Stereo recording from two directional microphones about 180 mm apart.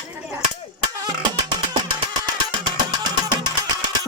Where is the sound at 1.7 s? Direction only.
25° right (ahead or behind).